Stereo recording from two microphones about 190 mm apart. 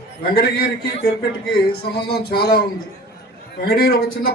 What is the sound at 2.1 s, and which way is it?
A man's voice, 55° left (ahead or behind).